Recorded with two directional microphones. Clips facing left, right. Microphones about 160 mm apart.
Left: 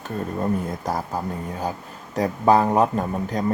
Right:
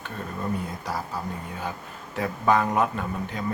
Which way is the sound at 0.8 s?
45° left (ahead or behind).